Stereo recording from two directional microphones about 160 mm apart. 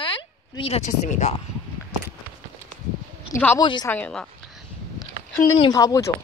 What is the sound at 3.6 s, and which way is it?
Speech, 30° left (ahead or behind).